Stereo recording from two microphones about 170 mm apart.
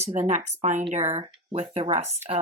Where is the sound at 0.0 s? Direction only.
40° right (ahead or behind).